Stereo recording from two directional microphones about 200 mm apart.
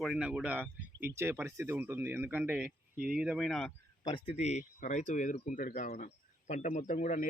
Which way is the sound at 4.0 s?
25° left (ahead or behind).